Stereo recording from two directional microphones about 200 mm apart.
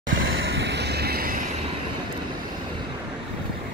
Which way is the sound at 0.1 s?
75° right (ahead or behind).